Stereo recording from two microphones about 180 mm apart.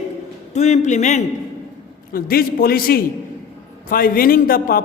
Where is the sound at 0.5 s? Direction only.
40° left (ahead or behind).